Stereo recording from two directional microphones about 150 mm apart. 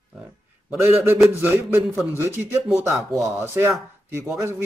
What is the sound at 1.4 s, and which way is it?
Speech, 15° right (ahead or behind).